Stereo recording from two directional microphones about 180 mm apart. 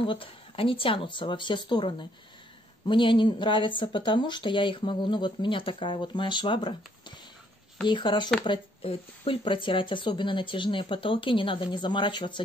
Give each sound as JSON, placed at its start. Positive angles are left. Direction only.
{"t": 0.0, "sound": "speech", "side_deg": 30}